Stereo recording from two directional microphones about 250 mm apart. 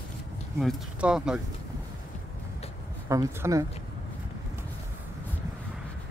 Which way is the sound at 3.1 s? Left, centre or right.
Centre.